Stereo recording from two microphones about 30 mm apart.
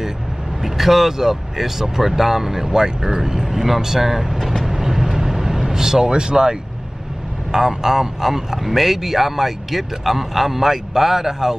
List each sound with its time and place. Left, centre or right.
0.7 s speech: centre
4.6 s vehicle: centre
7.5 s speech: centre